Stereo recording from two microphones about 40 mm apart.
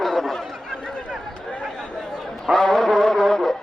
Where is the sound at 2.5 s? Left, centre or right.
Centre.